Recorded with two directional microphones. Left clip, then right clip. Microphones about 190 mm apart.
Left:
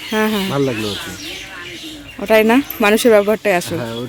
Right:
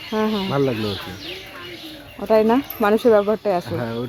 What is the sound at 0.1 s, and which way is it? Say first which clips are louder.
Speech: left 4 dB; 20° left (ahead or behind).